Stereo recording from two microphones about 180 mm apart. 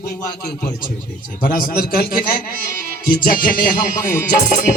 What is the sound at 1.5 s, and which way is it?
Speech, 50° left (ahead or behind).